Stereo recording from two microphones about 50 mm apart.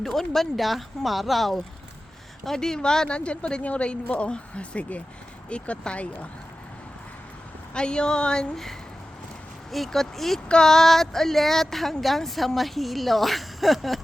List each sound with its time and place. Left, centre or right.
0.0 s speech: centre; by 6.2 s left
7.7 s speech: centre
9.7 s speech: centre